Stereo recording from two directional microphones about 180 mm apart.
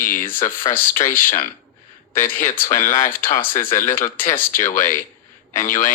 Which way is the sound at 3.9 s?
10° left (ahead or behind).